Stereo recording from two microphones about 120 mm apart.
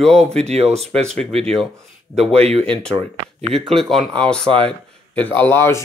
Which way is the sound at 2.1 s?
60° right (ahead or behind).